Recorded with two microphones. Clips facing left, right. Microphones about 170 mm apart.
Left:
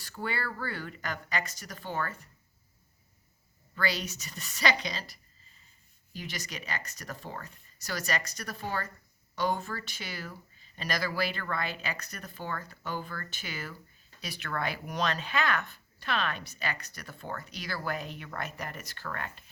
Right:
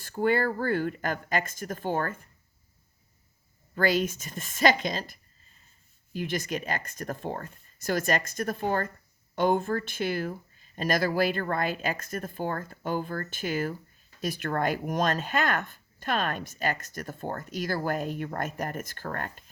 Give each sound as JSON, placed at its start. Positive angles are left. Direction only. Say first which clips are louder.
{"t": 0.0, "sound": "speech", "louder": "right 11 dB", "side_deg": -50}
{"t": 3.8, "sound": "speech", "louder": "right 8 dB", "side_deg": -50}